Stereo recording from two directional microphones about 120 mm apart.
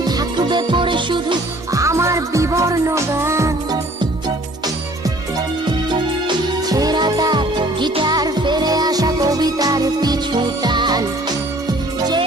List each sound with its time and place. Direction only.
0.0 s music: 35° right (ahead or behind)
1.7 s music: 25° right (ahead or behind)
6.2 s music: 35° right (ahead or behind)